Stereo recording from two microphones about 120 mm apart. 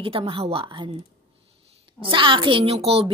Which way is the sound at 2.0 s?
45° right (ahead or behind).